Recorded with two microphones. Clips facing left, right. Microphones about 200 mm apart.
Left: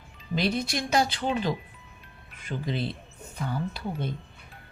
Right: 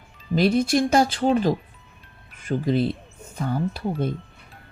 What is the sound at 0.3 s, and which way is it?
A woman's voice, 50° right (ahead or behind).